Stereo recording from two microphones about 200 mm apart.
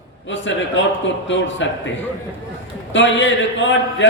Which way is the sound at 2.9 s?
65° left (ahead or behind).